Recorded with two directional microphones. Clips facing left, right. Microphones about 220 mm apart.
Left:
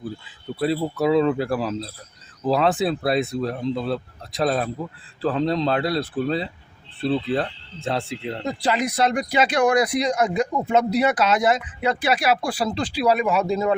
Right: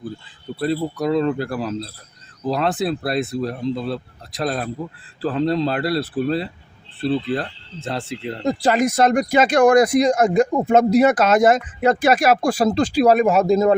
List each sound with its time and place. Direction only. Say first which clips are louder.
0.6 s speech: even; 5° left (ahead or behind)
8.4 s speech: right 6 dB; 45° right (ahead or behind)